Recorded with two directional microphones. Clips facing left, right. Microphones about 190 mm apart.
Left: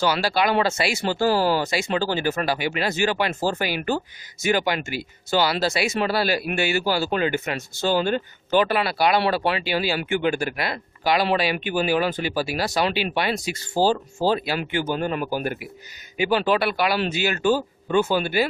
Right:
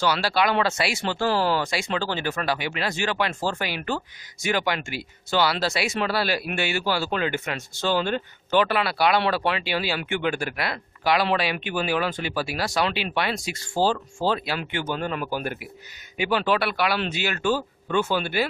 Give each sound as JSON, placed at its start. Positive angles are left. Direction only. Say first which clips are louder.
{"t": 0.0, "sound": "speech", "louder": "left 1 dB", "side_deg": 5}
{"t": 8.1, "sound": "speech", "louder": "left 2 dB", "side_deg": 35}
{"t": 8.7, "sound": "speech", "louder": "left 1 dB", "side_deg": 5}
{"t": 17.6, "sound": "speech", "louder": "left 4 dB", "side_deg": 15}
{"t": 18.1, "sound": "speech", "louder": "left 3 dB", "side_deg": 5}